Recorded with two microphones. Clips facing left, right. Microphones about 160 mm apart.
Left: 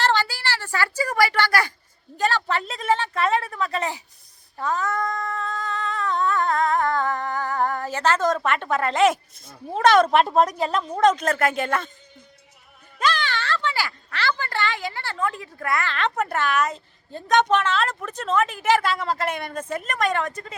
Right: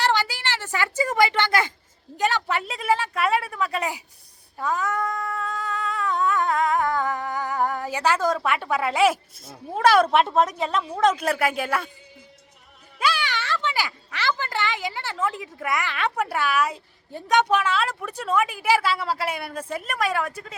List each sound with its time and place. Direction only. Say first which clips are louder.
0.0 s a sound: left 1 dB; 15° right (ahead or behind)
2.1 s a woman's voice: left 1 dB; 15° right (ahead or behind)
4.5 s humming: even; 10° right (ahead or behind)
13.0 s speech: left 1 dB; 10° right (ahead or behind)